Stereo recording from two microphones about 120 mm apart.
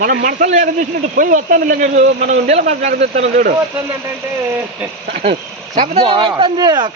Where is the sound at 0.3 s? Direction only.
90° right; by 3.4 s 70° right (ahead or behind).